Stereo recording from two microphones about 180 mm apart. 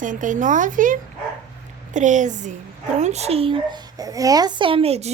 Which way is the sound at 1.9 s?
45° right (ahead or behind).